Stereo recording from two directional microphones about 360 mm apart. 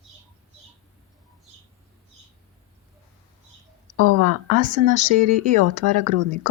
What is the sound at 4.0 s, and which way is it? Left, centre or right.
Speech, right.